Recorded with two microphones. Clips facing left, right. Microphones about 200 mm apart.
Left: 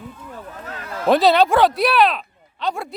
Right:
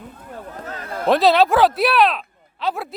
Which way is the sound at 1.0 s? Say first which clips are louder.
Even; centre (ahead or behind).